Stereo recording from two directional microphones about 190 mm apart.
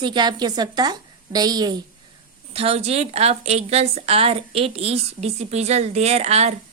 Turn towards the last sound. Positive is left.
turn(degrees=-35)  # may be behind; listen again after turning